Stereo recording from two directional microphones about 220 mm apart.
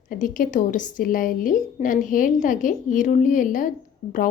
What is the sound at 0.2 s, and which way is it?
A woman's voice, 35° left (ahead or behind).